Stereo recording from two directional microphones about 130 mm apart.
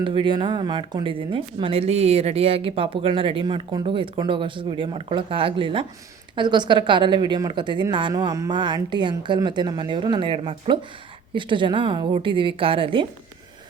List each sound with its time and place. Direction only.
0.0 s speech: 40° right (ahead or behind)